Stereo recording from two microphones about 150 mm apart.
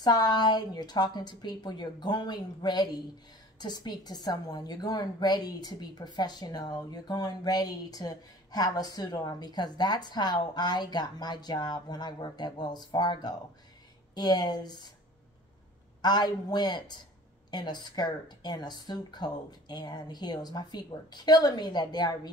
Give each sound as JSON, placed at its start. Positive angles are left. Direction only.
{"t": 0.0, "sound": "a woman's voice", "side_deg": 25}
{"t": 16.0, "sound": "a woman's voice", "side_deg": 30}